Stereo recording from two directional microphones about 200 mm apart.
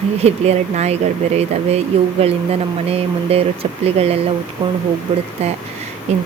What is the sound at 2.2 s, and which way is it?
Speech, 30° right (ahead or behind).